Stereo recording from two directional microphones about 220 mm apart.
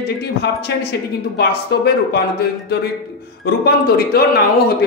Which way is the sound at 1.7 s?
50° left (ahead or behind).